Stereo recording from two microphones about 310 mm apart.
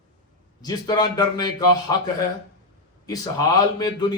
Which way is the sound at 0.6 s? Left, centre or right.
Centre.